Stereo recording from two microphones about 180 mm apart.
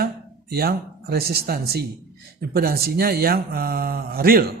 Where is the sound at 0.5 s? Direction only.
60° right (ahead or behind).